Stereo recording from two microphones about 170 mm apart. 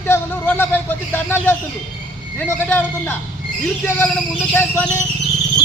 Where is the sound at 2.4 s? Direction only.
10° left (ahead or behind).